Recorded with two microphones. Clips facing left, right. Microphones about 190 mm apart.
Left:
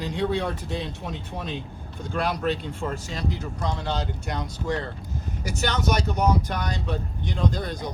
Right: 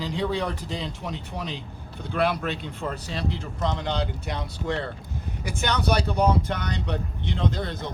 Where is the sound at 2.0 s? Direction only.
50° left (ahead or behind).